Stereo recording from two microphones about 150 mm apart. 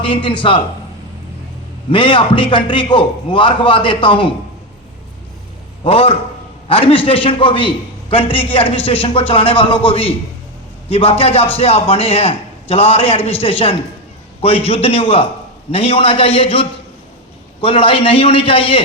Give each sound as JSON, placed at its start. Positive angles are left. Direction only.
{"t": 0.0, "sound": "a man's voice", "side_deg": 35}
{"t": 1.9, "sound": "a man's voice", "side_deg": 35}
{"t": 5.8, "sound": "a man's voice", "side_deg": 40}